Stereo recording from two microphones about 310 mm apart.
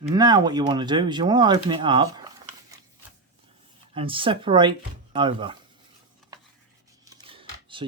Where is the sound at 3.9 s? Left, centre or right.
Centre.